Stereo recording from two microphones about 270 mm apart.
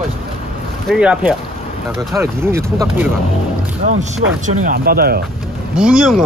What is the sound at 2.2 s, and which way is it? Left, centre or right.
Speech, centre.